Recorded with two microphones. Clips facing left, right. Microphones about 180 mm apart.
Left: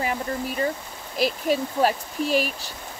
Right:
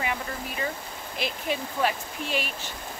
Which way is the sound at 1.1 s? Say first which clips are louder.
Left 8 dB; 40° left (ahead or behind).